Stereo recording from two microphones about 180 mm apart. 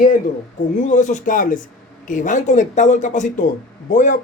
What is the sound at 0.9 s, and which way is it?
Speech, 45° left (ahead or behind).